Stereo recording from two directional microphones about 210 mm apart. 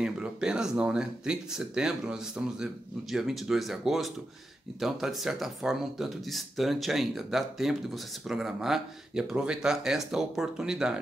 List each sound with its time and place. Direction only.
0.0 s speech: 5° right (ahead or behind)